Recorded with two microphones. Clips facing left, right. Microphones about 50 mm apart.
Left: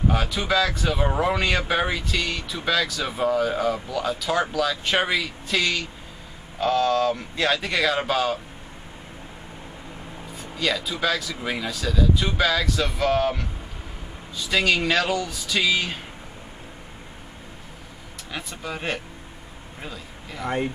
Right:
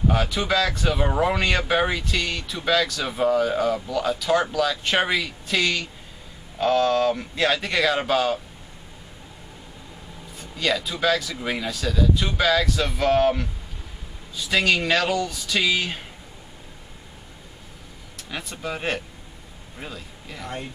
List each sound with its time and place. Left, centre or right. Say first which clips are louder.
0.1 s speech: right 1 dB; centre
10.3 s speech: right 1 dB; centre
18.3 s a man's voice: right 2 dB; centre
20.4 s speech: left 8 dB; left